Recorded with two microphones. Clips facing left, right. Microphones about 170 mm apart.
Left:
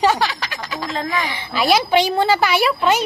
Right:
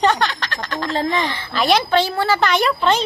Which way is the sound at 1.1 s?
10° left (ahead or behind).